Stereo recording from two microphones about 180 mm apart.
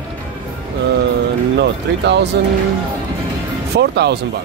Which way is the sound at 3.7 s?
70° right (ahead or behind).